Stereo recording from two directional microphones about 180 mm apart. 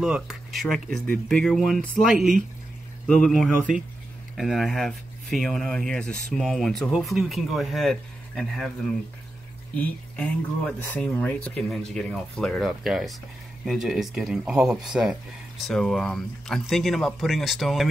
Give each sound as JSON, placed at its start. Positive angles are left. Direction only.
{"t": 0.0, "sound": "speech", "side_deg": -5}
{"t": 9.8, "sound": "speech", "side_deg": 5}